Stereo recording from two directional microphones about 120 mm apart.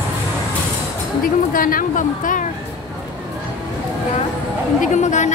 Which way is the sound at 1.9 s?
90° left.